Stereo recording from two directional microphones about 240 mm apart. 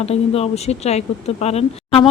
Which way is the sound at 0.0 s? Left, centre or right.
Left.